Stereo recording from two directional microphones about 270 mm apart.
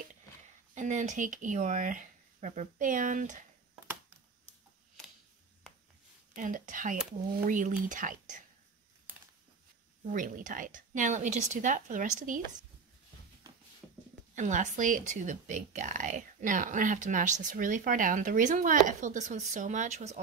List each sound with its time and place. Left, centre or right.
0.7 s speech: right
6.3 s speech: right
10.1 s speech: right
14.3 s speech: right